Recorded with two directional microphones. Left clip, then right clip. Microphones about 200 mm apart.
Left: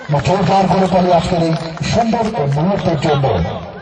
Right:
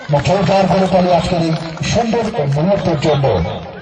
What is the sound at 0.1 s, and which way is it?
A man's voice, 40° right (ahead or behind).